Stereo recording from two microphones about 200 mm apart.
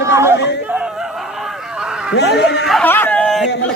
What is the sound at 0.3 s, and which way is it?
Chatter, 60° left (ahead or behind).